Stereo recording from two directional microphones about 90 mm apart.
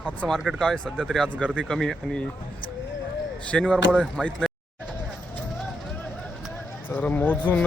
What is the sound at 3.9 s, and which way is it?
Speech, 10° right (ahead or behind).